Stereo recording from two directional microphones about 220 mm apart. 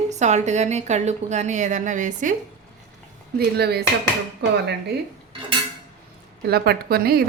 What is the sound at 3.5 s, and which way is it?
Speech, 45° right (ahead or behind).